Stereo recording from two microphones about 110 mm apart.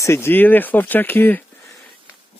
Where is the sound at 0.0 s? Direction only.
25° left (ahead or behind).